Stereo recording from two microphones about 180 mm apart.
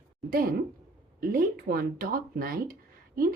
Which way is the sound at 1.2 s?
55° right (ahead or behind).